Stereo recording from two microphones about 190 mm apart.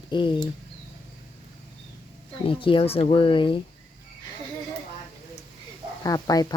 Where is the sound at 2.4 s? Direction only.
25° left (ahead or behind).